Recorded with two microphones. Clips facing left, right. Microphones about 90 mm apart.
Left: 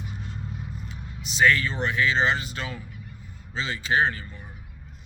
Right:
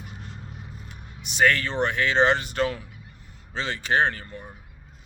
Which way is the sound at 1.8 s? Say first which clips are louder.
Right 5 dB; 55° right (ahead or behind).